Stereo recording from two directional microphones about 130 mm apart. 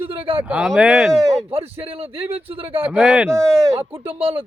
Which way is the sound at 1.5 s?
45° right (ahead or behind).